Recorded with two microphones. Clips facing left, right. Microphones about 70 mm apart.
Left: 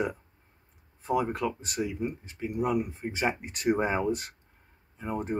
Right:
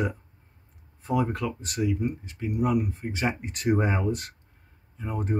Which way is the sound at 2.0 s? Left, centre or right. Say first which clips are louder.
Right 3 dB; left.